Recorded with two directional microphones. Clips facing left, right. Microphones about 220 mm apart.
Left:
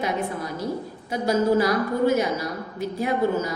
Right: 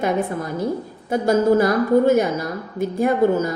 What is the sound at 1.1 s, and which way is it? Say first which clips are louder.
A woman's voice: right 4 dB; 50° right (ahead or behind).